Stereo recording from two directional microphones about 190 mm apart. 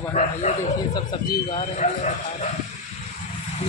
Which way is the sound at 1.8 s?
40° left (ahead or behind).